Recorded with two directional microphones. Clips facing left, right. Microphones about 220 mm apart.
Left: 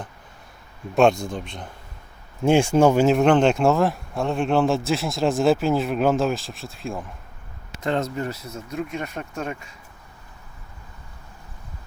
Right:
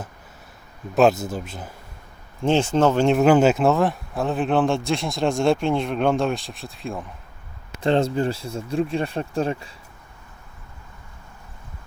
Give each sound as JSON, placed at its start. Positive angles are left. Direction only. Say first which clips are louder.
{"t": 0.9, "sound": "speech", "louder": "even", "side_deg": -5}
{"t": 2.4, "sound": "speech", "louder": "left 2 dB", "side_deg": 10}
{"t": 7.8, "sound": "speech", "louder": "right 5 dB", "side_deg": -30}